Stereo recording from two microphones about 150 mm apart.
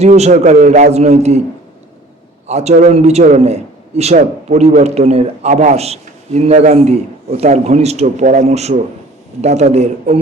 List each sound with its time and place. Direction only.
0.0 s a man's voice: 50° right (ahead or behind)
2.5 s a man's voice: 45° right (ahead or behind)